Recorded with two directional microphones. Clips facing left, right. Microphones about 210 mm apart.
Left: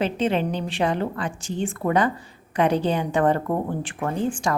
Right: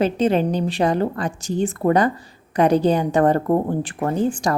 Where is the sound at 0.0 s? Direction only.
40° right (ahead or behind).